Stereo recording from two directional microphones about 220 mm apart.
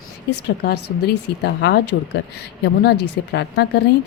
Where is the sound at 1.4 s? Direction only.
50° left (ahead or behind).